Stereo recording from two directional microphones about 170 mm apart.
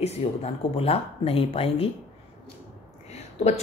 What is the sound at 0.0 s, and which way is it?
A woman's voice, 35° left (ahead or behind).